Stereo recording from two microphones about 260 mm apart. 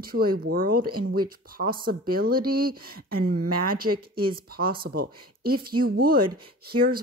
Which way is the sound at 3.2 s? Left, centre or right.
Right.